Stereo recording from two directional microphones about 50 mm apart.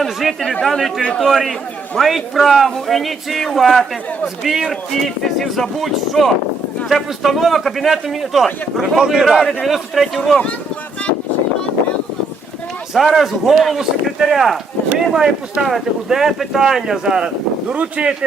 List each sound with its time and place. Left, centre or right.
0.0 s speech: centre
4.9 s speech: centre
13.1 s speech: centre
17.7 s speech: right